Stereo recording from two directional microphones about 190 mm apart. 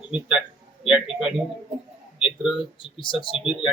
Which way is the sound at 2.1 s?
5° right (ahead or behind).